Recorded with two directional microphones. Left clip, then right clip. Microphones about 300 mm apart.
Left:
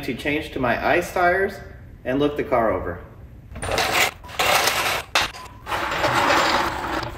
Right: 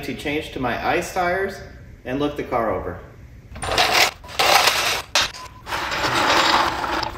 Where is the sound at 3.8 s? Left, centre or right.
Right.